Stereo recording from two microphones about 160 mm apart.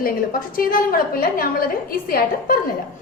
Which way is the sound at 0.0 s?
65° left (ahead or behind).